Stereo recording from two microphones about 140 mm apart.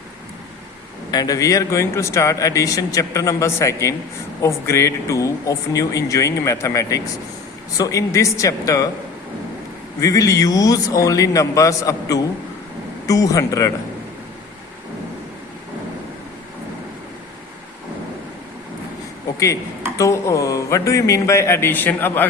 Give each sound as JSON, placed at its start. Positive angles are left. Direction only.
{"t": 1.1, "sound": "speech", "side_deg": 25}
{"t": 10.0, "sound": "speech", "side_deg": 25}
{"t": 20.0, "sound": "speech", "side_deg": 20}